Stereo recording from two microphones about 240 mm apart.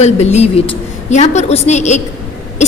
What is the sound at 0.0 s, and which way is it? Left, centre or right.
A woman's voice, left.